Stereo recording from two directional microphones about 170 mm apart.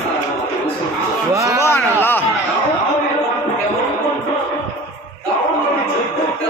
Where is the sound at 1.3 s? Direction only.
20° right (ahead or behind).